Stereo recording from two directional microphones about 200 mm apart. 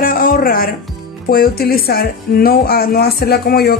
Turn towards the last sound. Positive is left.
turn(degrees=50)  # may be behind; listen again after turning